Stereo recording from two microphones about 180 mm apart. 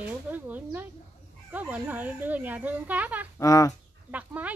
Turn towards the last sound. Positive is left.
turn(degrees=-10)  # may be behind; listen again after turning